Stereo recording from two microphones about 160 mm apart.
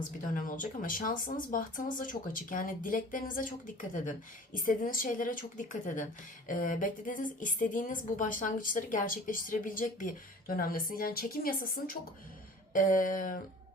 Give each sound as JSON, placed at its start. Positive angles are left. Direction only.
{"t": 0.3, "sound": "a woman's voice", "side_deg": 60}
{"t": 12.7, "sound": "a woman's voice", "side_deg": 55}